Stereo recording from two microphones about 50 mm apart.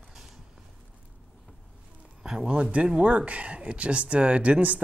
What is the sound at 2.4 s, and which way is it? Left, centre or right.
Speech, right.